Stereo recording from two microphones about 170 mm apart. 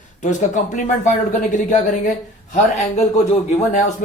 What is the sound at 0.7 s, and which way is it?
Speech, 45° left (ahead or behind).